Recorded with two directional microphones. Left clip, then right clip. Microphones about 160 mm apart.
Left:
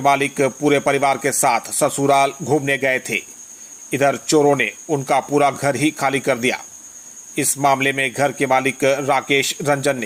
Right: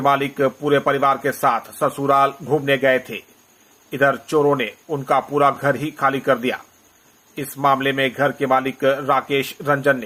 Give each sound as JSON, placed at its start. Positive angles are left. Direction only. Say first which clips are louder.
{"t": 0.0, "sound": "a man's voice", "louder": "left 1 dB", "side_deg": 25}